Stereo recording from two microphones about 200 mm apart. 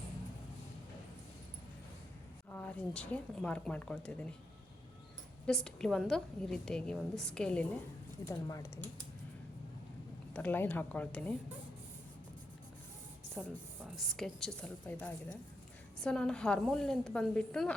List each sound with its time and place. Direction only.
2.5 s speech: 10° left (ahead or behind)
5.5 s a woman's voice: 5° left (ahead or behind)
8.3 s speech: 15° left (ahead or behind)
10.3 s speech: 10° left (ahead or behind)
13.3 s a woman's voice: 5° left (ahead or behind)
16.0 s a woman's voice: 5° left (ahead or behind)